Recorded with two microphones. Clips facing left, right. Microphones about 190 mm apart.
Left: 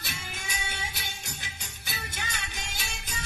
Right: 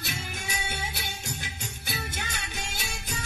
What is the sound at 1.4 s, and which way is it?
Music, 50° right (ahead or behind).